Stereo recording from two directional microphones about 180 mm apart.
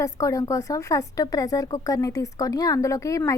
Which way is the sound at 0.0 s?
15° left (ahead or behind).